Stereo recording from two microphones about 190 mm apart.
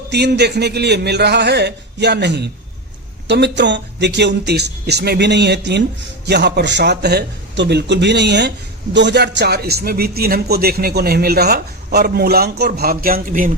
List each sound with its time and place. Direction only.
0.1 s a man's voice: 60° right (ahead or behind)